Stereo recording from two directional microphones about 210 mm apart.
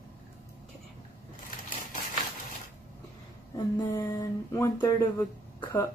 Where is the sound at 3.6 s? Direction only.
15° left (ahead or behind).